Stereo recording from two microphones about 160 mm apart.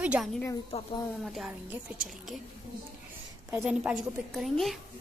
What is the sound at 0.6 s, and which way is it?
Speech, 35° left (ahead or behind).